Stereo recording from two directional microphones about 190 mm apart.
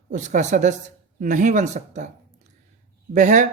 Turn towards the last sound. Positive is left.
turn(degrees=-40)  # may be behind; listen again after turning